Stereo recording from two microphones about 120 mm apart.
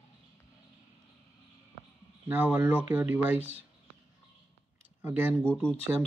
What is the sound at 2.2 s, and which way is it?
Speech, 15° right (ahead or behind).